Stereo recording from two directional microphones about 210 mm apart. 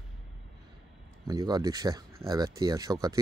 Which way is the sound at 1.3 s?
15° right (ahead or behind).